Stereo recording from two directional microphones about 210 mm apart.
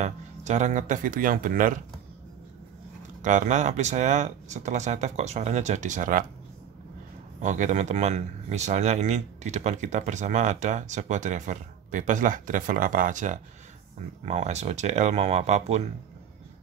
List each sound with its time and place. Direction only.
0.0 s speech: 35° right (ahead or behind)
3.2 s speech: 35° right (ahead or behind)
7.4 s speech: 35° right (ahead or behind)